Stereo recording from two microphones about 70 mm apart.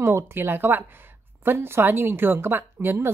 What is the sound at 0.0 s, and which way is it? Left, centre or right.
A woman's voice, right.